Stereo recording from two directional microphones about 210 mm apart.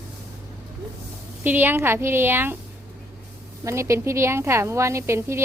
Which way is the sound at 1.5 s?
10° right (ahead or behind).